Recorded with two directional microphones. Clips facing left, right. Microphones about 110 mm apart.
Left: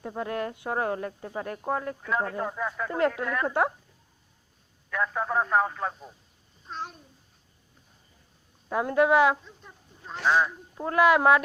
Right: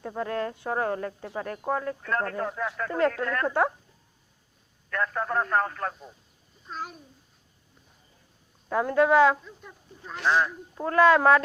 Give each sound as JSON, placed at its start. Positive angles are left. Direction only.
{"t": 0.2, "sound": "speech", "side_deg": 20}
{"t": 2.0, "sound": "speech", "side_deg": 5}
{"t": 4.9, "sound": "a man's voice", "side_deg": 5}
{"t": 8.7, "sound": "speech", "side_deg": 20}
{"t": 10.2, "sound": "a man's voice", "side_deg": 5}